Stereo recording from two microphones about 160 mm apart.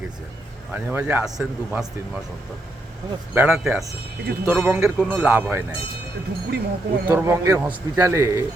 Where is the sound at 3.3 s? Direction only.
15° right (ahead or behind).